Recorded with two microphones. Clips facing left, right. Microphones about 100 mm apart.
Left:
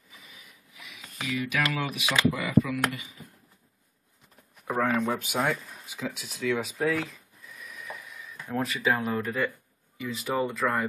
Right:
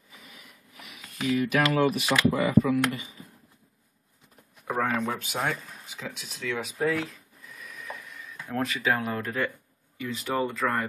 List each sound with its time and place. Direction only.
0.2 s a sound: 55° right (ahead or behind)
1.3 s speech: 40° right (ahead or behind)
4.6 s speech: centre (ahead or behind)